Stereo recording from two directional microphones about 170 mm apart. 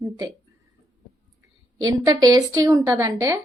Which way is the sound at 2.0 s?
20° right (ahead or behind).